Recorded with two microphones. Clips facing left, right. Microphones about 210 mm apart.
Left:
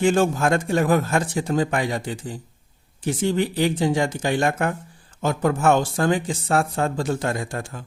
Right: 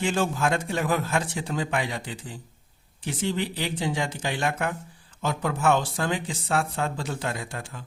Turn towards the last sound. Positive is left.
turn(degrees=45)  # may be behind; listen again after turning